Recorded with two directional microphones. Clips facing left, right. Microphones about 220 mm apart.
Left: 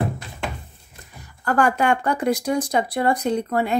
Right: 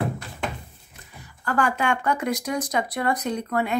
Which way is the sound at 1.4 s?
45° left (ahead or behind).